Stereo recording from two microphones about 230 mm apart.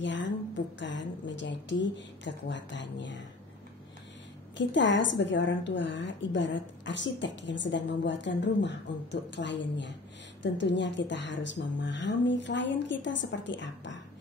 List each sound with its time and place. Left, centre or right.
0.0 s a woman's voice: left
4.6 s a woman's voice: left